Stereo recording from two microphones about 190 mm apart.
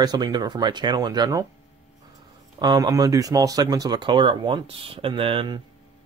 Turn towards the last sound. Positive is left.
turn(degrees=-25)  # may be behind; listen again after turning